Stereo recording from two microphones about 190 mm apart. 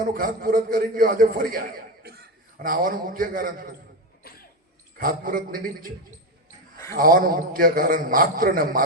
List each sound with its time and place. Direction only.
0.0 s a man's voice: 50° right (ahead or behind)
4.2 s cough: 50° left (ahead or behind)
4.9 s a man's voice: 50° right (ahead or behind)
6.9 s a man's voice: 50° right (ahead or behind)